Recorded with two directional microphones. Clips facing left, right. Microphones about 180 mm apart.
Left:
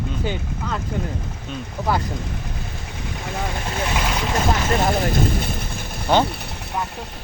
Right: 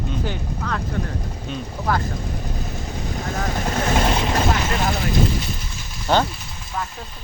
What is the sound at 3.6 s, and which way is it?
Vehicle, 45° right (ahead or behind).